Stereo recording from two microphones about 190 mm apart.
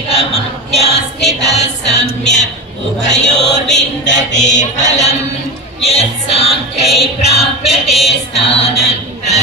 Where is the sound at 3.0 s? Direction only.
65° left (ahead or behind).